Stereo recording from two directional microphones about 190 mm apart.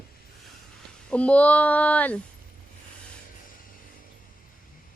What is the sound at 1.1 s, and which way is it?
Speech, 5° left (ahead or behind).